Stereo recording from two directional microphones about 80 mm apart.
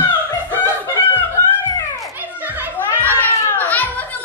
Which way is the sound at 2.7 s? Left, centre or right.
Left.